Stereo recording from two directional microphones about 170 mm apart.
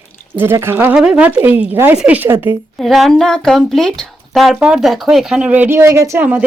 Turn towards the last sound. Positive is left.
turn(degrees=-15)  # may be behind; listen again after turning